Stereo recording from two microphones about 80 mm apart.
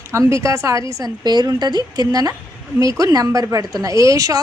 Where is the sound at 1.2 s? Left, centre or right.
Right.